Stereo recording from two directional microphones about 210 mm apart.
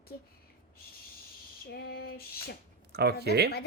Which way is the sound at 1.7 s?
50° left (ahead or behind).